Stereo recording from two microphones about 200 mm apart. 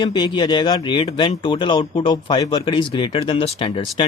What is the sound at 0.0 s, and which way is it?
Speech, 25° left (ahead or behind).